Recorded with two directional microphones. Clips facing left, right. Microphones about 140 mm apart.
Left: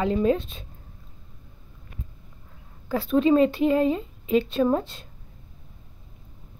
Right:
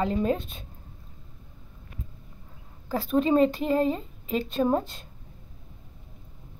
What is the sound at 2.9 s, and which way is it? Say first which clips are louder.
A woman's voice: left 3 dB; 40° right (ahead or behind).